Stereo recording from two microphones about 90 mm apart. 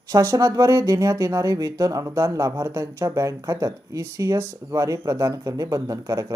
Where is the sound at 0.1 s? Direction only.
35° right (ahead or behind).